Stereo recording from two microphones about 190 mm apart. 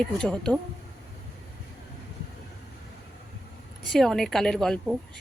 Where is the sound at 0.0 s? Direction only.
5° left (ahead or behind).